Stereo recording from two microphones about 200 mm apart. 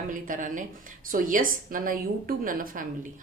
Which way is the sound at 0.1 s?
40° right (ahead or behind).